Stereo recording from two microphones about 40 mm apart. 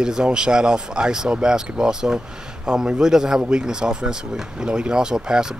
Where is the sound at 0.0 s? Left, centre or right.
Centre.